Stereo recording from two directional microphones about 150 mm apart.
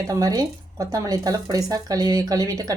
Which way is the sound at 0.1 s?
25° right (ahead or behind).